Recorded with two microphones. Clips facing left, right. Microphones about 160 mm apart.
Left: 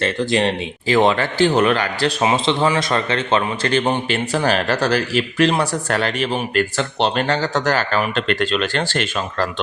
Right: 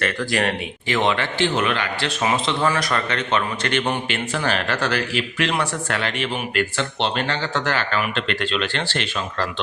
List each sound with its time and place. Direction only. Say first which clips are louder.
0.0 s a man's voice: left 4 dB; 25° left (ahead or behind); by 2.1 s 40° left (ahead or behind)
2.2 s a man's voice: left 3 dB; 30° left (ahead or behind); by 9.5 s 45° left (ahead or behind)